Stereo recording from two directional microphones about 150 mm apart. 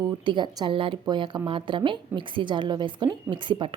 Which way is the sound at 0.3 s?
30° right (ahead or behind).